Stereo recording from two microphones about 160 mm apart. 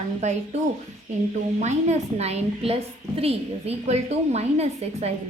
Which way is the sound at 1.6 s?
45° right (ahead or behind).